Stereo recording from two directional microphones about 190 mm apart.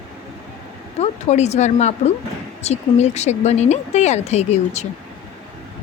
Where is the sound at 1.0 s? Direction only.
35° left (ahead or behind).